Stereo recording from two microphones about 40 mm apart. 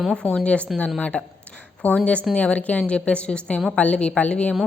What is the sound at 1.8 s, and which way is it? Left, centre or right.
A woman's voice, left.